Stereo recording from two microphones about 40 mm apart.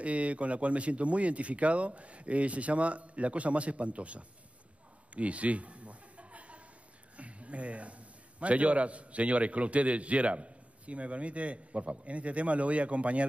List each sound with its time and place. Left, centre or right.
0.0 s speech: right
5.1 s chuckle: right
7.2 s a man's voice: right